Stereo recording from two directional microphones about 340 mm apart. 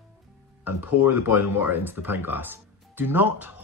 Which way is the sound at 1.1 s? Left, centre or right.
Centre.